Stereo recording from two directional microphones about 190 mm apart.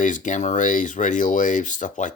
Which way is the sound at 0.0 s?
40° left (ahead or behind).